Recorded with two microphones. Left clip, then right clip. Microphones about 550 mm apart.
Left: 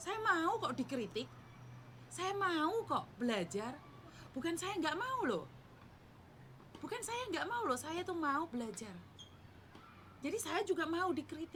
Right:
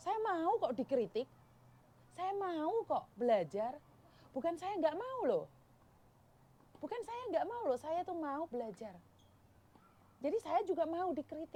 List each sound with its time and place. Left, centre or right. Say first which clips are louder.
0.0 s a woman's voice: left 1 dB; right
2.1 s a woman's voice: left 2 dB; right
6.9 s a woman's voice: right 2 dB; right
10.2 s a woman's voice: right 3 dB; right